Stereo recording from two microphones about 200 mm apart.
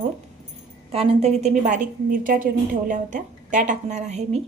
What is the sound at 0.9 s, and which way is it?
A woman's voice, 30° right (ahead or behind).